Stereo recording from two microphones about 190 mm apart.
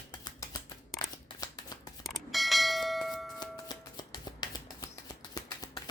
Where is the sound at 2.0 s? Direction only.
Centre (ahead or behind).